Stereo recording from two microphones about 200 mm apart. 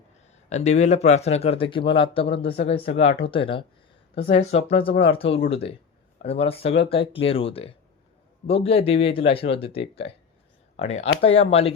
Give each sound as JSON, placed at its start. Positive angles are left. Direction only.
{"t": 0.5, "sound": "speech", "side_deg": 35}